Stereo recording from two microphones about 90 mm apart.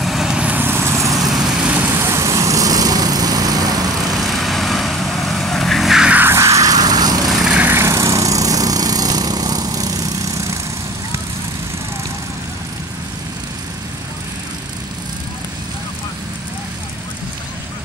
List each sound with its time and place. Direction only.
0.0 s vehicle: 5° right (ahead or behind)
0.7 s vehicle: 30° right (ahead or behind)
1.3 s vehicle: 15° right (ahead or behind)
1.9 s vehicle: 30° right (ahead or behind); by 4.1 s 45° right (ahead or behind)
4.3 s vehicle: centre (ahead or behind)
6.0 s music: 20° right (ahead or behind)
6.3 s vehicle: 35° right (ahead or behind)
7.2 s vehicle: 5° right (ahead or behind)
7.5 s vehicle: 20° right (ahead or behind)
7.8 s lawn mower: 35° right (ahead or behind)